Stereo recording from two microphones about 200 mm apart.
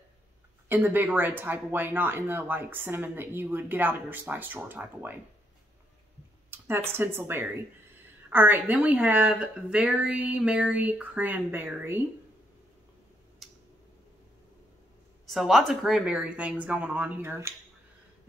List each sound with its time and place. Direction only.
0.7 s speech: 10° right (ahead or behind)
6.9 s speech: 10° right (ahead or behind)
13.4 s tick-tock: centre (ahead or behind)
15.2 s speech: centre (ahead or behind)